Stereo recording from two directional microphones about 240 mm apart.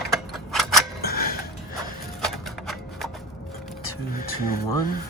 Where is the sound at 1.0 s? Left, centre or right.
Left.